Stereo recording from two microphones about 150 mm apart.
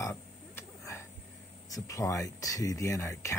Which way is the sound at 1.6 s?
20° left (ahead or behind).